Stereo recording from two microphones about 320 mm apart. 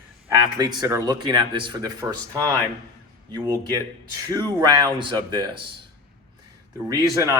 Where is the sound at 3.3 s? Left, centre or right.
Centre.